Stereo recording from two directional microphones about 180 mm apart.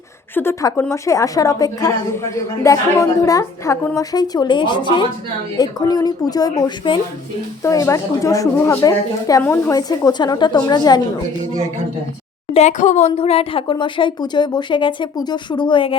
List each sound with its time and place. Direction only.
0.3 s a woman's voice: 15° left (ahead or behind)
12.5 s a woman's voice: 40° left (ahead or behind)